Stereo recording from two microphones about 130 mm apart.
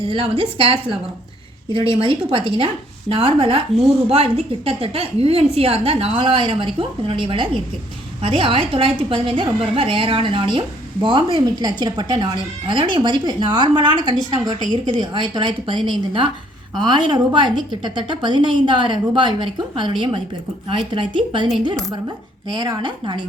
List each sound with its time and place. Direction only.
0.1 s a woman's voice: 45° right (ahead or behind)
14.7 s speech: 35° left (ahead or behind)
15.0 s speech: 35° right (ahead or behind)